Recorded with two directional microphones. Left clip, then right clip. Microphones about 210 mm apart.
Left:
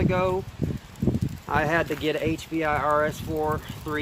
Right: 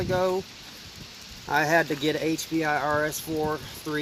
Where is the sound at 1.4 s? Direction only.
35° right (ahead or behind).